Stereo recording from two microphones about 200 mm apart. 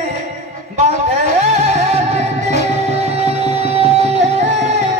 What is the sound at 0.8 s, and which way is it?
Music, 35° right (ahead or behind).